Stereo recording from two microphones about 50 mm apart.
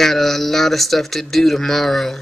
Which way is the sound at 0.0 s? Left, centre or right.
Centre.